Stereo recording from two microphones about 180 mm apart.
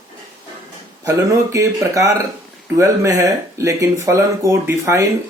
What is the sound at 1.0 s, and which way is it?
Speech, 15° right (ahead or behind).